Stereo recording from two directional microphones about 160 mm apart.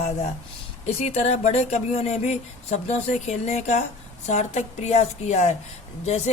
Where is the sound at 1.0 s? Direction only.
40° left (ahead or behind).